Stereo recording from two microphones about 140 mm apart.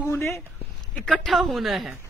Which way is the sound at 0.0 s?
20° left (ahead or behind).